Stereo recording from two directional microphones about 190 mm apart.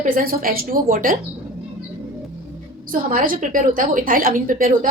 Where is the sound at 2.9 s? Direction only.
45° right (ahead or behind).